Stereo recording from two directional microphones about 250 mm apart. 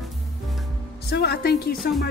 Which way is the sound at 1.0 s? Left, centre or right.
Left.